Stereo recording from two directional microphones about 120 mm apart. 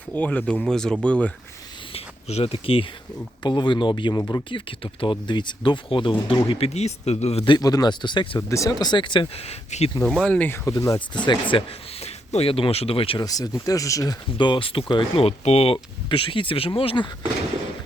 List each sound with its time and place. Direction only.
0.1 s speech: 10° left (ahead or behind)
1.9 s a sound: 60° left (ahead or behind)
3.4 s speech: 40° left (ahead or behind)
4.2 s speech: 30° left (ahead or behind)
4.4 s speech: 45° left (ahead or behind)
6.7 s speech: 65° left (ahead or behind)
7.4 s speech: 35° left (ahead or behind)
8.4 s speech: 25° left (ahead or behind)
8.7 s speech: 35° left (ahead or behind); by 9.9 s 65° left (ahead or behind)
10.0 s speech: 10° left (ahead or behind)
10.7 s speech: 30° left (ahead or behind)
11.3 s speech: 45° left (ahead or behind)
13.2 s speech: 30° left (ahead or behind)
14.3 s speech: 40° left (ahead or behind)